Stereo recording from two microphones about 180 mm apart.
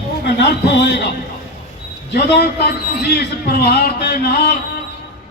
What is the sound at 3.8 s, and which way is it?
Speech, 65° left (ahead or behind).